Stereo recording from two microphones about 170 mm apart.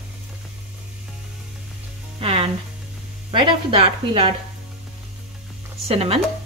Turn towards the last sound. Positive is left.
turn(degrees=-35)  # may be behind; listen again after turning